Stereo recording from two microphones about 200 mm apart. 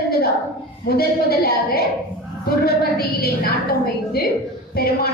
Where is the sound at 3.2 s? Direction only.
50° left (ahead or behind).